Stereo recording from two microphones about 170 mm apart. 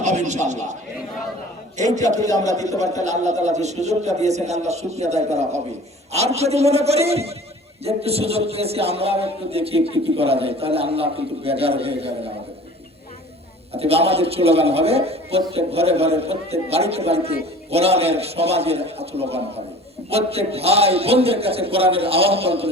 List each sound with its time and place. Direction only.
0.0 s a man's voice: 45° right (ahead or behind)
1.8 s a man's voice: 45° right (ahead or behind)
13.7 s a woman's voice: 35° right (ahead or behind)